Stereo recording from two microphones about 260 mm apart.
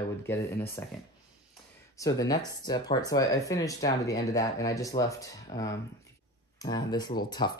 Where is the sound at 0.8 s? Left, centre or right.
Centre.